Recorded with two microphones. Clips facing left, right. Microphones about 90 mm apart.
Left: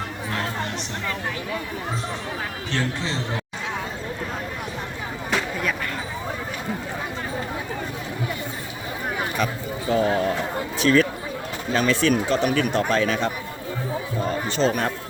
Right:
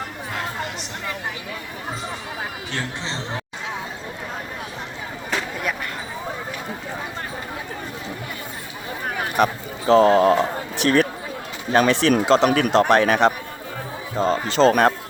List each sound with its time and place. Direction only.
9.3 s a sound: 70° right (ahead or behind)
11.7 s speech: 60° right (ahead or behind)
12.2 s speech: 90° right
12.5 s speech: 65° right (ahead or behind)
14.2 s speech: 90° right
14.7 s speech: 70° right (ahead or behind)